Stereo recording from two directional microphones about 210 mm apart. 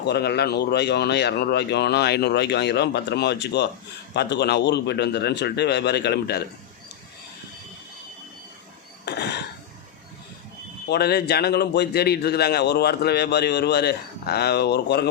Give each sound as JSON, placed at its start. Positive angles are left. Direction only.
{"t": 0.0, "sound": "a man's voice", "side_deg": 50}
{"t": 9.0, "sound": "a sound", "side_deg": 50}
{"t": 10.8, "sound": "a man's voice", "side_deg": 50}